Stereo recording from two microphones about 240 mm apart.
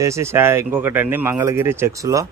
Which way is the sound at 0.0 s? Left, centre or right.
Centre.